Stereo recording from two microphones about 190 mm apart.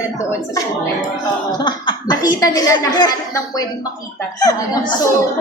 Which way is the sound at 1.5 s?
20° left (ahead or behind).